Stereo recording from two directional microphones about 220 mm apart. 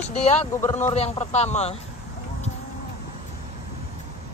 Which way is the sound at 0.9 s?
30° left (ahead or behind).